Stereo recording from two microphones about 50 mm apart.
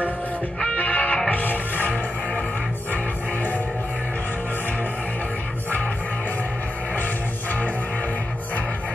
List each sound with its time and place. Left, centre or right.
0.7 s music: left